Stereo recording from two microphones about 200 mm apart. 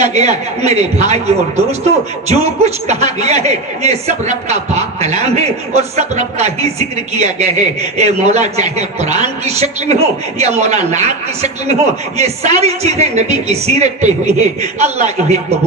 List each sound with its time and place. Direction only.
0.3 s a man's voice: 35° right (ahead or behind)